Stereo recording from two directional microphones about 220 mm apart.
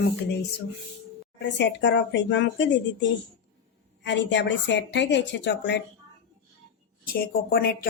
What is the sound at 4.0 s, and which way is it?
Speech, 55° left (ahead or behind).